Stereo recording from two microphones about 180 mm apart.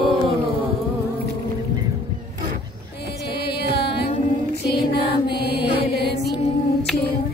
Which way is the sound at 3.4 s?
65° left (ahead or behind).